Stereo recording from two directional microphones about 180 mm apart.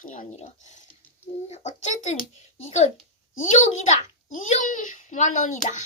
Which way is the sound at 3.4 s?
40° left (ahead or behind).